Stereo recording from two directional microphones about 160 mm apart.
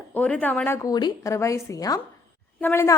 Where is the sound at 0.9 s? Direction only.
25° left (ahead or behind).